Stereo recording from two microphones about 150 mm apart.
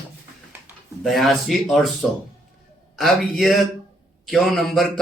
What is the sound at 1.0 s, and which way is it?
A man's voice, centre (ahead or behind).